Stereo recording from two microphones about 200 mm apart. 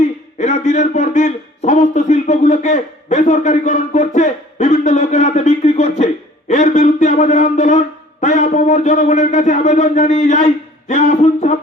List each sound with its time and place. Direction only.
0.3 s a man's voice: 35° left (ahead or behind)
6.5 s a sound: 35° left (ahead or behind)
8.2 s a man's voice: 35° left (ahead or behind)